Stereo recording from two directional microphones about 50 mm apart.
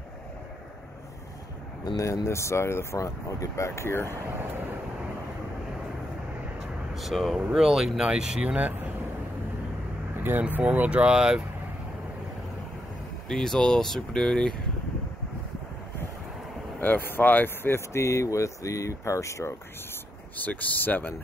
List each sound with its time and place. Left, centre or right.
2.0 s speech: left
7.0 s speech: centre
8.4 s speech: right
10.5 s speech: right
13.3 s speech: centre
16.8 s speech: left
17.7 s speech: left
20.3 s speech: left